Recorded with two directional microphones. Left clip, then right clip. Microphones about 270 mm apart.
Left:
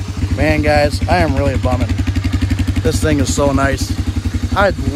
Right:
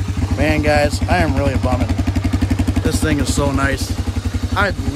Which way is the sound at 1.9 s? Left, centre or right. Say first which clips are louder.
Even; right.